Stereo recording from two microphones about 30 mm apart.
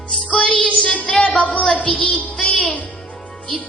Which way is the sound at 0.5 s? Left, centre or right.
Left.